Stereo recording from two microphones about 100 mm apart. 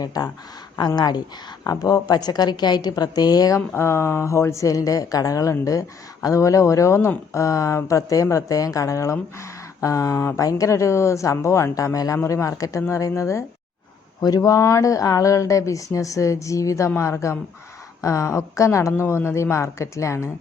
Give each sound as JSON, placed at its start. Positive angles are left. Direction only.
{"t": 0.0, "sound": "a woman's voice", "side_deg": 40}
{"t": 3.8, "sound": "speech", "side_deg": 25}